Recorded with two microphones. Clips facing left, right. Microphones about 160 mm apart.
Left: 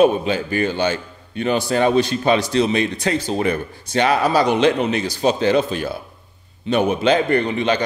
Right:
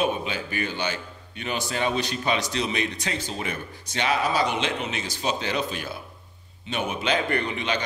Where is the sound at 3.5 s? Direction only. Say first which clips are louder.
Left 11 dB; 50° left (ahead or behind).